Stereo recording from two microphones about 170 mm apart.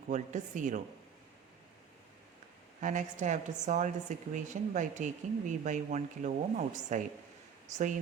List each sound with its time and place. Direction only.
0.1 s speech: 45° right (ahead or behind)
2.8 s speech: 45° right (ahead or behind)